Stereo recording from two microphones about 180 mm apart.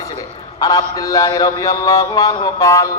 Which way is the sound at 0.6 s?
20° left (ahead or behind).